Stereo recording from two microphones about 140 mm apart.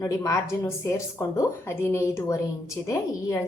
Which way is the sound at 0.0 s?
20° left (ahead or behind).